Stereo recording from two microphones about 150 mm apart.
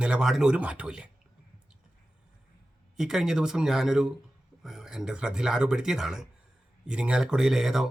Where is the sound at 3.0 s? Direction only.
5° right (ahead or behind).